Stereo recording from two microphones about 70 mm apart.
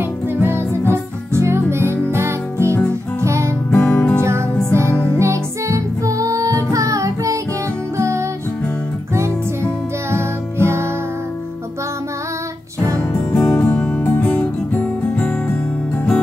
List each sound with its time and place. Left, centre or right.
0.4 s music: right
3.7 s music: left
4.2 s music: right
10.1 s music: right
13.1 s music: left
13.7 s music: centre
14.0 s music: left